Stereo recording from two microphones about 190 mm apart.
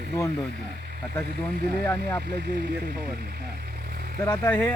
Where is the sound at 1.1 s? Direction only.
5° left (ahead or behind).